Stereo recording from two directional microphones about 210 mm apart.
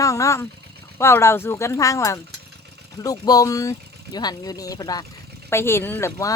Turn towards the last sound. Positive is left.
turn(degrees=15)  # may be behind; listen again after turning